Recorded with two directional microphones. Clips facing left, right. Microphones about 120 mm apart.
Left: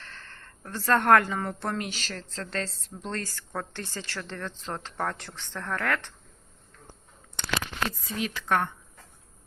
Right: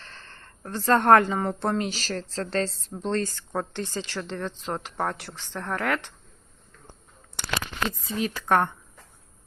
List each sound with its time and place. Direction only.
0.0 s speech: 15° right (ahead or behind)
7.9 s speech: 25° right (ahead or behind)
8.3 s speech: 45° right (ahead or behind)